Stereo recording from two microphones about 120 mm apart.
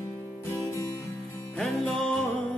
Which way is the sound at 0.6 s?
25° left (ahead or behind).